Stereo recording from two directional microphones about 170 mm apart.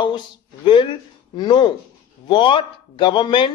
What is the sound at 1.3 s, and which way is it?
Speech, 25° left (ahead or behind).